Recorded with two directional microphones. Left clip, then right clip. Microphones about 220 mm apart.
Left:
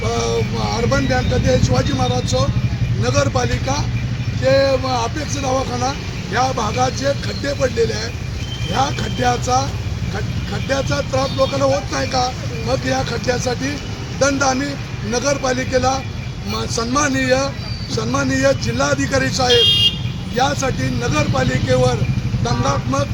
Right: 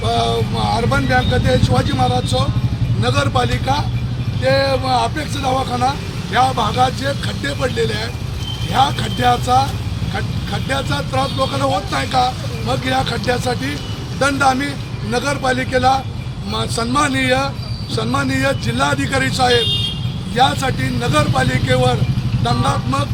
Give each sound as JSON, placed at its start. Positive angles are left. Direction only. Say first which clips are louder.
{"t": 0.1, "sound": "a sound", "louder": "right 4 dB", "side_deg": 0}
{"t": 1.7, "sound": "speech", "louder": "right 2 dB", "side_deg": -5}
{"t": 2.2, "sound": "speech", "louder": "even", "side_deg": -20}
{"t": 3.0, "sound": "speech", "louder": "right 1 dB", "side_deg": -5}
{"t": 10.7, "sound": "speech", "louder": "left 2 dB", "side_deg": -5}